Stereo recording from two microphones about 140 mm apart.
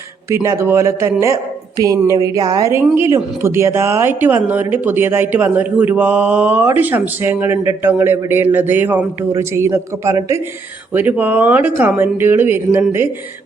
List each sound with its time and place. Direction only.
0.3 s a woman's voice: 20° right (ahead or behind)